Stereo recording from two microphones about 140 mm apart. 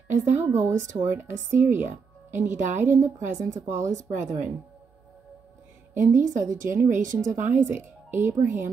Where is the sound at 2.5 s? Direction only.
60° right (ahead or behind).